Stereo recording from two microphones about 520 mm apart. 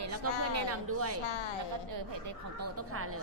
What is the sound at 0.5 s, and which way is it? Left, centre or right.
Speech, right.